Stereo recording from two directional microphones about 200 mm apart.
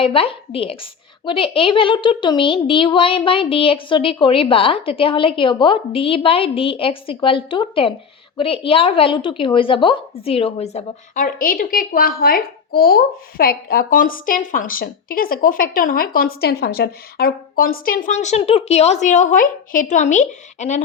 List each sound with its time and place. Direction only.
0.0 s a woman's voice: 25° left (ahead or behind)